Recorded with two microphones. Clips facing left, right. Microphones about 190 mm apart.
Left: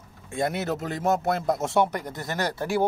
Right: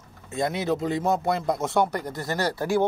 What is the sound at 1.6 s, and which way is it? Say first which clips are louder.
Speech: even; 20° left (ahead or behind).